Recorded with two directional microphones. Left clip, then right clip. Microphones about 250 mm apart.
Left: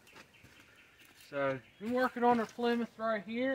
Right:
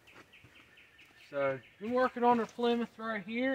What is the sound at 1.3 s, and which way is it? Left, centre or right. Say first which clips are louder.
Speech: right 1 dB; left.